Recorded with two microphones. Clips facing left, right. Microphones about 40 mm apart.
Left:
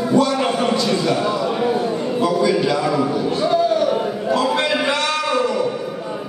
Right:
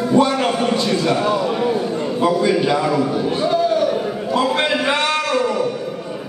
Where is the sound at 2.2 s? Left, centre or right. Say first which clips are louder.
Right 1 dB; right.